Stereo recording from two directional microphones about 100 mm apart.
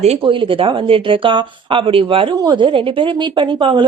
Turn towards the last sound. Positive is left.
turn(degrees=-60)  # may be behind; listen again after turning